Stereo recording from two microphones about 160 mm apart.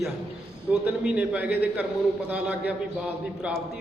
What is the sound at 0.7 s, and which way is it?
A man's voice, 5° right (ahead or behind).